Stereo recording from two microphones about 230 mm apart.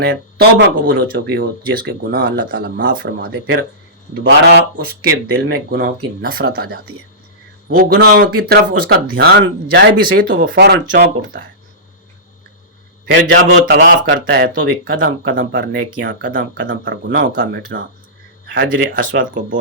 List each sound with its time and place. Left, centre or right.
0.0 s speech: right
13.1 s speech: right
15.2 s speech: right
18.5 s speech: right